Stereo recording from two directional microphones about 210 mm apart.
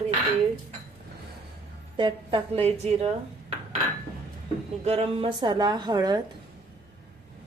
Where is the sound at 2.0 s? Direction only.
25° right (ahead or behind).